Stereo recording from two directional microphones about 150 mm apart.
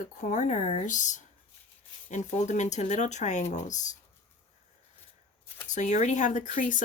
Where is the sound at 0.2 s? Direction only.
60° left (ahead or behind).